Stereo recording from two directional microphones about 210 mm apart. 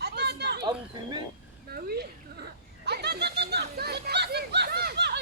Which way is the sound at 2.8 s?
50° right (ahead or behind).